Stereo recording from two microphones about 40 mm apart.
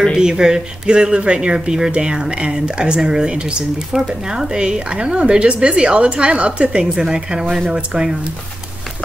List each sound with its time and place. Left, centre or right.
0.2 s speech: centre
6.8 s speech: centre